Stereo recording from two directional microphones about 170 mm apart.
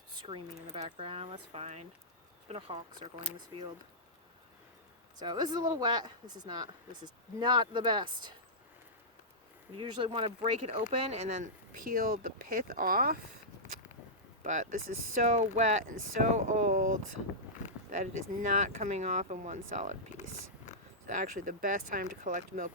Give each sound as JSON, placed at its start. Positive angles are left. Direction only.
{"t": 0.2, "sound": "speech", "side_deg": -35}
{"t": 5.2, "sound": "speech", "side_deg": -25}
{"t": 9.7, "sound": "speech", "side_deg": -30}
{"t": 11.9, "sound": "speech", "side_deg": -55}
{"t": 14.4, "sound": "speech", "side_deg": -45}
{"t": 18.0, "sound": "speech", "side_deg": -45}
{"t": 20.7, "sound": "a sound", "side_deg": 45}
{"t": 21.1, "sound": "speech", "side_deg": -50}